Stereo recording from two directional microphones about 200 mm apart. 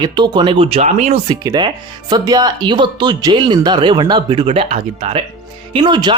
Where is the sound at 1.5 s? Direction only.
20° right (ahead or behind).